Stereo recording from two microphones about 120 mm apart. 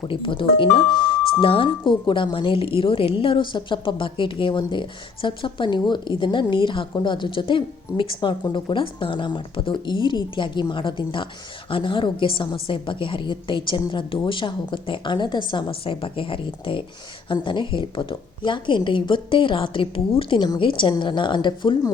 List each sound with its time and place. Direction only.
0.1 s a woman's voice: 45° left (ahead or behind)